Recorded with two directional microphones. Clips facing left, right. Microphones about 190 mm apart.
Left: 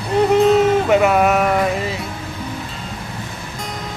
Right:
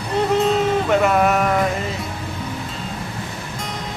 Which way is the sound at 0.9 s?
5° left (ahead or behind).